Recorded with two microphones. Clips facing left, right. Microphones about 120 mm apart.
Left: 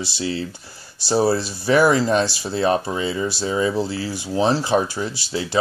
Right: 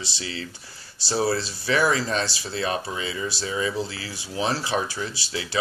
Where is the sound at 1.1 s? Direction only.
30° left (ahead or behind).